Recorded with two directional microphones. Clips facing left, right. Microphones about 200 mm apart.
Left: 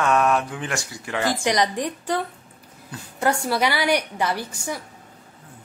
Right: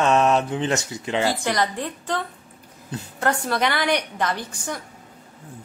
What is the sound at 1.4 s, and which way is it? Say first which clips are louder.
Speech: left 2 dB; 15° left (ahead or behind).